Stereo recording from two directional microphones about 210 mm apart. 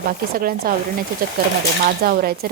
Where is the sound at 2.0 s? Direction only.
45° right (ahead or behind).